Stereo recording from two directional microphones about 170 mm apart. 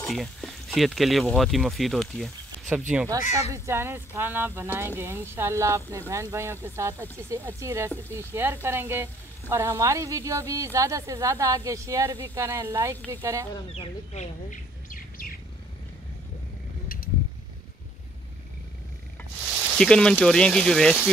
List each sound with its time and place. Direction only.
0.0 s speech: centre (ahead or behind)
3.1 s speech: 20° right (ahead or behind)
13.7 s speech: 40° left (ahead or behind)
19.7 s speech: 5° left (ahead or behind)